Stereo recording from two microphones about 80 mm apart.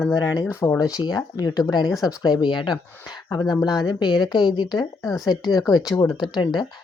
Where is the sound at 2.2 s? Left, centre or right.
Left.